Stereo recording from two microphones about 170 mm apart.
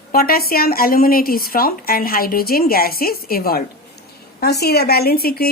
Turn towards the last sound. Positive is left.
turn(degrees=65)  # may be behind; listen again after turning